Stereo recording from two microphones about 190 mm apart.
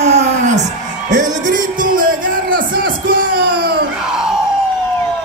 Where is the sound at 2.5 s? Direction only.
50° right (ahead or behind).